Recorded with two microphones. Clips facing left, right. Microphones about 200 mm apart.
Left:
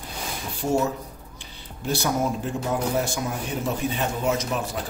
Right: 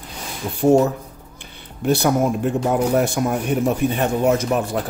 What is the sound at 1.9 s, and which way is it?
A man's voice, 60° right (ahead or behind).